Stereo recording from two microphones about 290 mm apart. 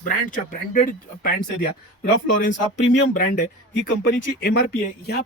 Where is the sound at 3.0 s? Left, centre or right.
Left.